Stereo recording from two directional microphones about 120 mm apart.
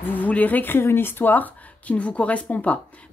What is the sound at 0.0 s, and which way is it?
Speech, 15° left (ahead or behind).